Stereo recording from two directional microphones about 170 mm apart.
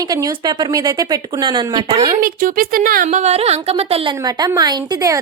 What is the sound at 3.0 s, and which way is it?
A woman's voice, 40° right (ahead or behind).